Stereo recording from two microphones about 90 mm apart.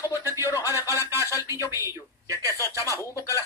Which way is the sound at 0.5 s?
40° left (ahead or behind).